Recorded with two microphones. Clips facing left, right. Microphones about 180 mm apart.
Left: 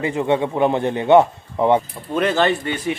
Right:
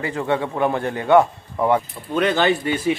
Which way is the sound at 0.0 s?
20° left (ahead or behind).